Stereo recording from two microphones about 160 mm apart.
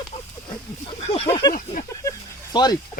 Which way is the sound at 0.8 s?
40° left (ahead or behind).